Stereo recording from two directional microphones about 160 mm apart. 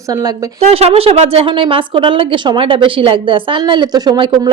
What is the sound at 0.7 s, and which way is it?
Speech, 35° right (ahead or behind).